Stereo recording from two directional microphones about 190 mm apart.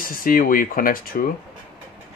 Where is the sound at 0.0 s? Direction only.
50° left (ahead or behind).